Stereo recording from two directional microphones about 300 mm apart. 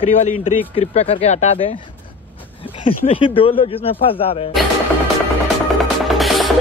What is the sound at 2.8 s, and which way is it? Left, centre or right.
Speech, centre.